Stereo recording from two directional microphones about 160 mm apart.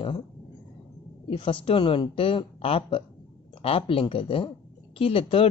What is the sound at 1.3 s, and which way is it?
Speech, 30° left (ahead or behind).